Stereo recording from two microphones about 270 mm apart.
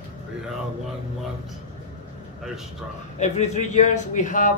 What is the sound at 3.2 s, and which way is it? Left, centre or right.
A man's voice, left.